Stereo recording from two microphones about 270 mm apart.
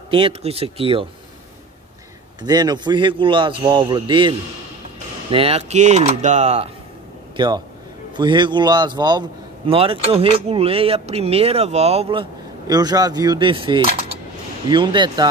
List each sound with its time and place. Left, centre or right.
0.1 s speech: right
2.4 s a man's voice: centre